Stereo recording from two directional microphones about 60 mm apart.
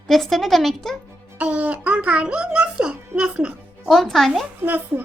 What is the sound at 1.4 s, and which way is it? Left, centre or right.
A child's voice, right.